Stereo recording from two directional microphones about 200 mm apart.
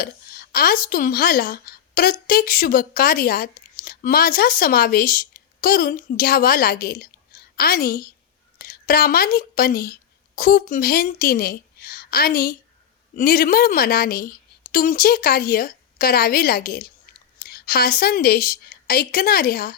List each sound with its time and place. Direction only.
0.0 s a woman's voice: 50° left (ahead or behind)